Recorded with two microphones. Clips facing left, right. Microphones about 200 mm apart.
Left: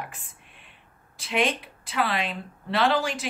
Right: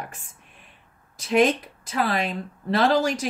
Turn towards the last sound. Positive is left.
turn(degrees=-40)  # may be behind; listen again after turning